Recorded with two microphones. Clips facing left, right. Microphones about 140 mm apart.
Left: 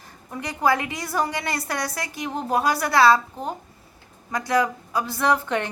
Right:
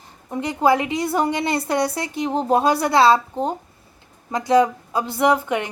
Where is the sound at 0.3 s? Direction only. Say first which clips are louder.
Right 4 dB; 20° right (ahead or behind).